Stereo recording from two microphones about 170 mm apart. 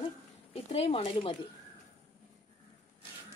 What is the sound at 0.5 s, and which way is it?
Speech, 35° left (ahead or behind).